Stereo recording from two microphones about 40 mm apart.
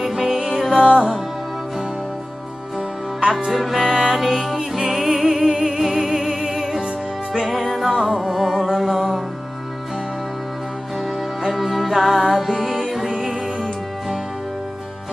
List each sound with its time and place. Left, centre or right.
0.0 s music: centre
0.7 s music: centre
3.3 s music: centre
11.4 s music: centre